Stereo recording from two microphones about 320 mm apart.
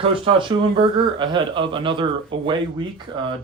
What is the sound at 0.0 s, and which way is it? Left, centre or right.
Speech, centre.